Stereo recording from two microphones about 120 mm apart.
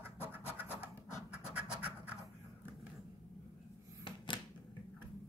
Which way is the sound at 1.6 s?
15° right (ahead or behind).